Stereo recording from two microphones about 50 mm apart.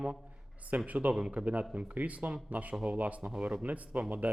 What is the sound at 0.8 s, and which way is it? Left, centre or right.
Speech, right.